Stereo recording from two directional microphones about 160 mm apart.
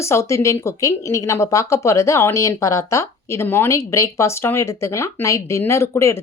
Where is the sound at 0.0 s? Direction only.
15° left (ahead or behind).